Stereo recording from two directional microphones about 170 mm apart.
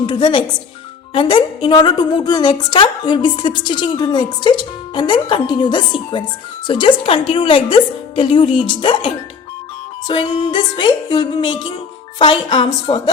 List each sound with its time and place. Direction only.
0.0 s a woman's voice: 25° left (ahead or behind)
10.1 s a woman's voice: 30° left (ahead or behind)